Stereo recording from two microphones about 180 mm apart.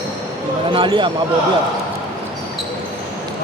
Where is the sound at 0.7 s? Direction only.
25° right (ahead or behind).